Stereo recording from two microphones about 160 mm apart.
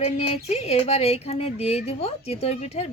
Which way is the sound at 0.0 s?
40° left (ahead or behind).